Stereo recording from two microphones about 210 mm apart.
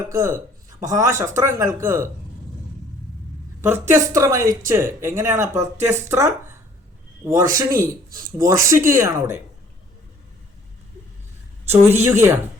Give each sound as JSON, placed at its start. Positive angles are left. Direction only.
{"t": 0.1, "sound": "speech", "side_deg": -15}
{"t": 3.6, "sound": "speech", "side_deg": -10}
{"t": 11.7, "sound": "speech", "side_deg": -10}